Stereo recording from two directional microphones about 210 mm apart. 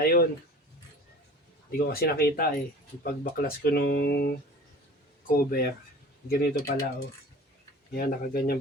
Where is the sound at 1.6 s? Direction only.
45° left (ahead or behind).